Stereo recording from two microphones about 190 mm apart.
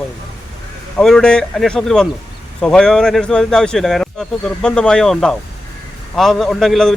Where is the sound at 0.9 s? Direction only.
5° left (ahead or behind).